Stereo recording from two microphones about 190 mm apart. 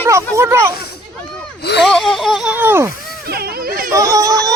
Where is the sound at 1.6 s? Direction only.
60° left (ahead or behind).